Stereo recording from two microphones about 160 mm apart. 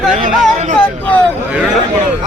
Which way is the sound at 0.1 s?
50° right (ahead or behind).